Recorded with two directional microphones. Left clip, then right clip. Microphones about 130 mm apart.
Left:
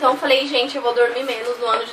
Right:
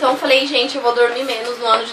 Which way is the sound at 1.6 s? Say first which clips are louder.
Right 5 dB; 15° right (ahead or behind).